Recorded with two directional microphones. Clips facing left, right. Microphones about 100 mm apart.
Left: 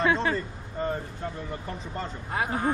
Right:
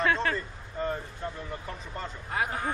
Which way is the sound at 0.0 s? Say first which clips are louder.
Left 2 dB; 20° left (ahead or behind).